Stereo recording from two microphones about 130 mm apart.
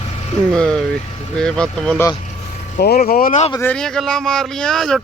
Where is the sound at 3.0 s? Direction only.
90° left.